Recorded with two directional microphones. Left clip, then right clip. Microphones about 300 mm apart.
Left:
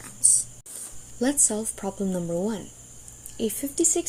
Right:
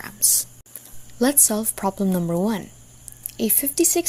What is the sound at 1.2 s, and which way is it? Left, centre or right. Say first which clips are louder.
Speech: right 4 dB; right.